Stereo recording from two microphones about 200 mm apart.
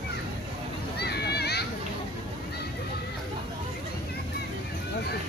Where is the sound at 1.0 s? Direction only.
55° left (ahead or behind).